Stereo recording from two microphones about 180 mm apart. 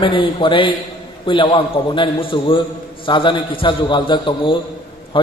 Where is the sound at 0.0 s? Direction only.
30° left (ahead or behind).